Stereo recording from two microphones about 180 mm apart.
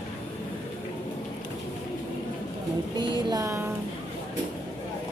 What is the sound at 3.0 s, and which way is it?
Music, 20° right (ahead or behind).